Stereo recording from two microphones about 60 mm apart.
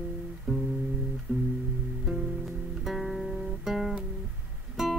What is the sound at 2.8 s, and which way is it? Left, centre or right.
Music, centre.